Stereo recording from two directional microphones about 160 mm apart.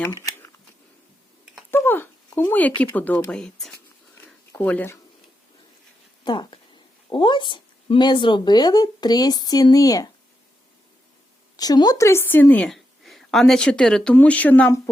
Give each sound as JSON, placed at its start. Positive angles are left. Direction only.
{"t": 0.1, "sound": "shuffling cards", "side_deg": 20}
{"t": 1.7, "sound": "a sound", "side_deg": 15}
{"t": 2.9, "sound": "a woman's voice", "side_deg": 10}
{"t": 4.2, "sound": "a sound", "side_deg": 10}
{"t": 6.2, "sound": "speech", "side_deg": 30}
{"t": 11.5, "sound": "a woman's voice", "side_deg": 25}